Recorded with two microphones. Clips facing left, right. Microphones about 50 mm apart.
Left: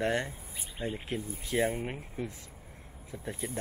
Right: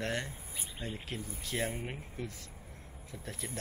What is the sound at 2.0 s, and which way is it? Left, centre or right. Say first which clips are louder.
Speech: left 4 dB; left.